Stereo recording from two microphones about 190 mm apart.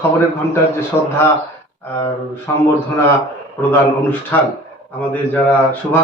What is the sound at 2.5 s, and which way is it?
Speech, 15° left (ahead or behind).